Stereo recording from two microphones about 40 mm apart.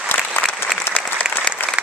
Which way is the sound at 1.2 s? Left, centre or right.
Centre.